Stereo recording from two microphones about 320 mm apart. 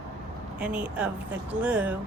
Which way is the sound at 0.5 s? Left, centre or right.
Centre.